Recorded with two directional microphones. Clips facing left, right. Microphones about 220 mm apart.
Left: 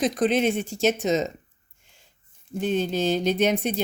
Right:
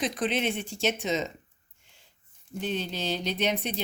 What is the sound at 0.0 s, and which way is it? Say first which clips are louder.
Speech: left 7 dB; 45° left (ahead or behind).